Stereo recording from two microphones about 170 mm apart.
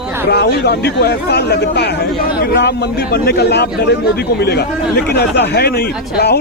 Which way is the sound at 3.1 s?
70° left (ahead or behind).